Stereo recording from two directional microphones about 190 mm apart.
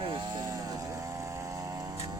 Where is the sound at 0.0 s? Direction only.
25° right (ahead or behind).